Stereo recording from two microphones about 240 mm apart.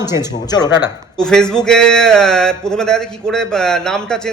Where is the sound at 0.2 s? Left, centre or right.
Centre.